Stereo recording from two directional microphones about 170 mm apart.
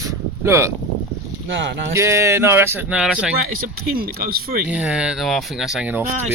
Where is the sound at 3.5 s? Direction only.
60° right (ahead or behind).